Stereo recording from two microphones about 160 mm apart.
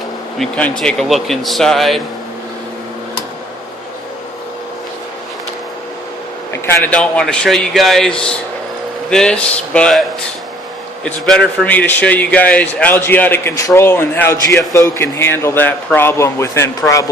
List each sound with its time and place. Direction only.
0.3 s a man's voice: 5° left (ahead or behind)
6.5 s a man's voice: 15° left (ahead or behind)
11.0 s a man's voice: 5° left (ahead or behind)